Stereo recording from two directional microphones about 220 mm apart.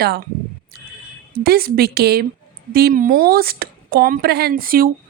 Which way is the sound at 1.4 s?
45° right (ahead or behind).